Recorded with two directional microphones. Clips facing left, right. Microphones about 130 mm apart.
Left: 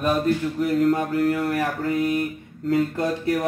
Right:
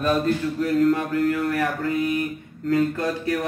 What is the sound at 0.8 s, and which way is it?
Mantra, 35° left (ahead or behind).